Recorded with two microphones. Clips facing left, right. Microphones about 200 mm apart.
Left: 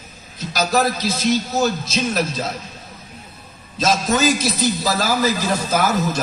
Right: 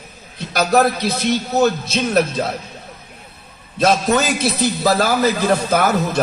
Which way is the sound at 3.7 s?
60° right (ahead or behind).